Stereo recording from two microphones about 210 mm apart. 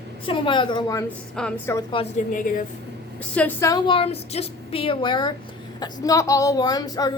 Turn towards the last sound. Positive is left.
turn(degrees=20)  # may be behind; listen again after turning